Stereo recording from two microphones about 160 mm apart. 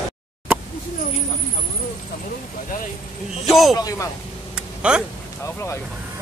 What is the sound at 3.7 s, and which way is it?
Speech, 25° left (ahead or behind).